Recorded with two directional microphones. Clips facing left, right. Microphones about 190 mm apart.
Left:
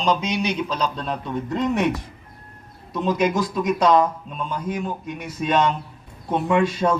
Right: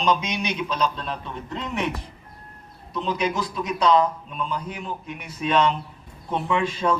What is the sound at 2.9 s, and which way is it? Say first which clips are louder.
Speech: left 5 dB; 45° left (ahead or behind).